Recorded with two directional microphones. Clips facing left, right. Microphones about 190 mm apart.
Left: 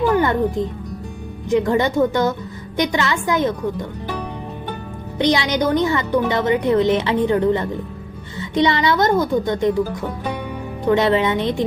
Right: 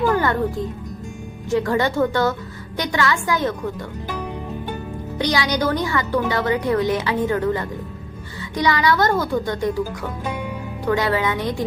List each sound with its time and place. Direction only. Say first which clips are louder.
0.0 s a woman's voice: left 2 dB; 15° left (ahead or behind)
5.1 s a woman's voice: left 4 dB; 20° left (ahead or behind)